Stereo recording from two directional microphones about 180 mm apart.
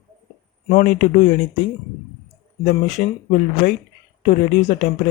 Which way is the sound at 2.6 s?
40° left (ahead or behind).